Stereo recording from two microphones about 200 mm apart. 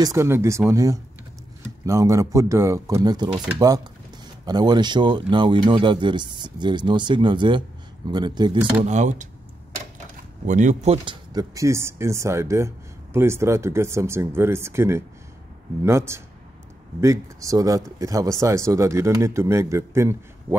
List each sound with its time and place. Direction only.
0.0 s speech: 15° right (ahead or behind)
8.5 s speech: 10° right (ahead or behind)
8.8 s speech: 35° right (ahead or behind)
10.4 s speech: 40° right (ahead or behind)
11.3 s speech: 15° right (ahead or behind)